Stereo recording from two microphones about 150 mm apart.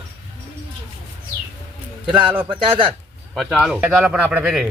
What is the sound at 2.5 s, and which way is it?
Speech, 35° right (ahead or behind).